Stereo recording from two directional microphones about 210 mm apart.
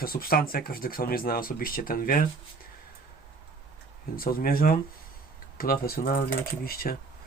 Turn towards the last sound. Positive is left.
turn(degrees=45)  # may be behind; listen again after turning